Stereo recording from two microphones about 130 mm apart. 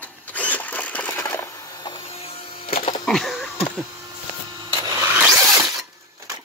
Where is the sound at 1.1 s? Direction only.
25° left (ahead or behind).